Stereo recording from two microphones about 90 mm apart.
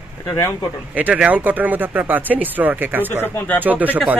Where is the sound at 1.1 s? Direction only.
15° right (ahead or behind).